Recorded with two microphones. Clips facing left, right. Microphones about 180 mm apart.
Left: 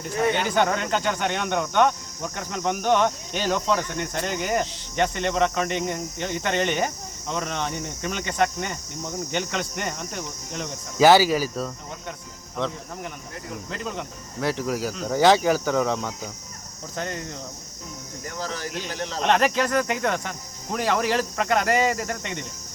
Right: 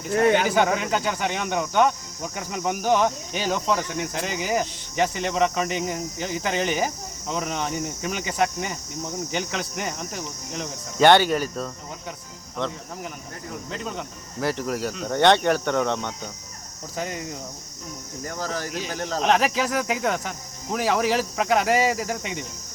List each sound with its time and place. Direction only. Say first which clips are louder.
0.0 s speech: right 4 dB; 5° right (ahead or behind)
18.3 s speech: right 2 dB; 45° right (ahead or behind)
19.2 s speech: left 1 dB; centre (ahead or behind)